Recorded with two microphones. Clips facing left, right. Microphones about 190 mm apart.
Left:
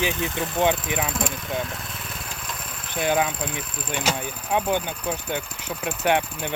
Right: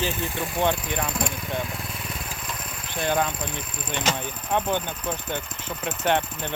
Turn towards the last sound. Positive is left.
turn(degrees=10)  # may be behind; listen again after turning